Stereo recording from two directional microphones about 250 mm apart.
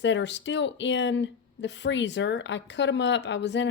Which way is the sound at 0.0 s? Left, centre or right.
Left.